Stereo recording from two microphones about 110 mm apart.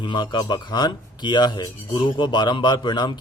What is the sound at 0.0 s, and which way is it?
Speech, 45° left (ahead or behind).